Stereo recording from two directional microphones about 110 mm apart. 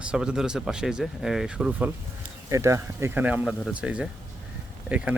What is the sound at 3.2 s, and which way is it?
Speech, 15° right (ahead or behind).